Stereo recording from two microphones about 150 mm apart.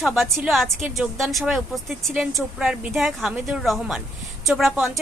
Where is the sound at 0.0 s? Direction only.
Centre (ahead or behind).